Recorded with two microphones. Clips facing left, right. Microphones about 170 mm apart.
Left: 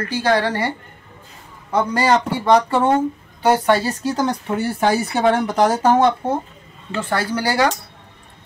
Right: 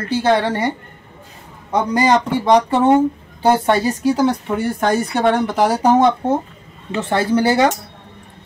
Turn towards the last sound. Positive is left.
turn(degrees=-20)  # may be behind; listen again after turning